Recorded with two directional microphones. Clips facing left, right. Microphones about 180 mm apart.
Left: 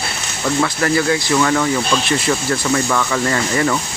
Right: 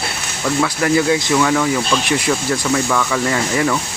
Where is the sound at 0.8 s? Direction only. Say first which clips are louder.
Right 3 dB; 15° right (ahead or behind).